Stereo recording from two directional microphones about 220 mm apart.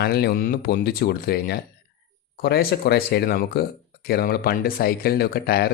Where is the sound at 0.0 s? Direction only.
45° left (ahead or behind).